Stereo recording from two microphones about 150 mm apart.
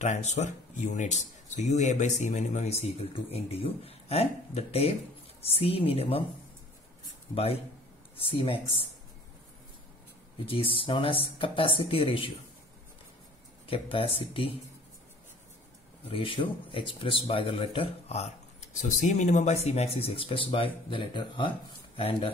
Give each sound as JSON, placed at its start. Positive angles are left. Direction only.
{"t": 0.0, "sound": "speech", "side_deg": 50}
{"t": 8.2, "sound": "speech", "side_deg": 40}
{"t": 10.4, "sound": "speech", "side_deg": 40}
{"t": 13.7, "sound": "speech", "side_deg": 40}
{"t": 16.1, "sound": "speech", "side_deg": 35}